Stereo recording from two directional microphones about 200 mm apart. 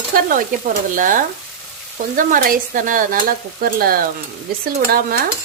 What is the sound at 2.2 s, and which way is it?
Speech, 45° right (ahead or behind).